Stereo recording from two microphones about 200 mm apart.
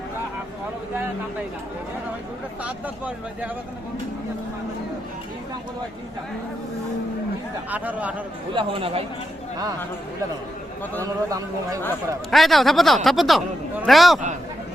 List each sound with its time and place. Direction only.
2.6 s speech: 5° right (ahead or behind)
7.7 s speech: 5° right (ahead or behind)
8.5 s speech: 25° right (ahead or behind)
11.0 s speech: 15° right (ahead or behind)
12.3 s speech: centre (ahead or behind)